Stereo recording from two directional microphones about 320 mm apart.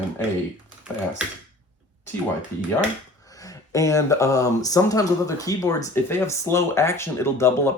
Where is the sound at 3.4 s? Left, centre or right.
Centre.